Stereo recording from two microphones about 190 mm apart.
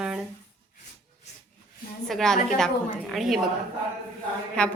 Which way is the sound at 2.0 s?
Centre (ahead or behind).